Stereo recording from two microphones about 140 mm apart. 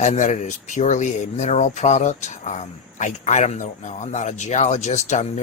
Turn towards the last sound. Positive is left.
turn(degrees=55)  # may be behind; listen again after turning